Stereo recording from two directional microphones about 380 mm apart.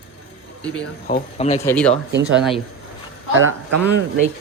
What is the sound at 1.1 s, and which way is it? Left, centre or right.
Speech, centre.